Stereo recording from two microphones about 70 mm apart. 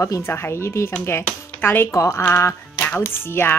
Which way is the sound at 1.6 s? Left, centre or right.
Left.